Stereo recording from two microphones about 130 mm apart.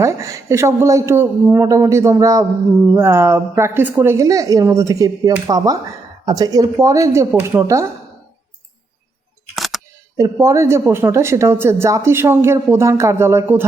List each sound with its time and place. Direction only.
0.0 s speech: 25° right (ahead or behind)
9.6 s single-lens reflex camera: centre (ahead or behind)
10.2 s speech: 20° right (ahead or behind)